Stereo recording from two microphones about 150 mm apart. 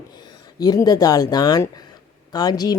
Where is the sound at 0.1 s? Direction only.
25° left (ahead or behind).